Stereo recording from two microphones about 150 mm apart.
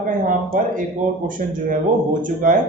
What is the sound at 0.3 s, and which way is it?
A man's voice, 65° right (ahead or behind).